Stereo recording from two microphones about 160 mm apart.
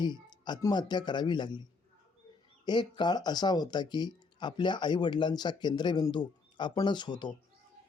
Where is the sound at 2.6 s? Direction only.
30° left (ahead or behind).